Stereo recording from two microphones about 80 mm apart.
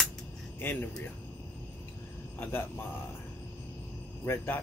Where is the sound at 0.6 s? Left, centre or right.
Left.